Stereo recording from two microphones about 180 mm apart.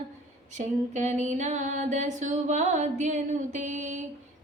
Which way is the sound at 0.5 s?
40° right (ahead or behind).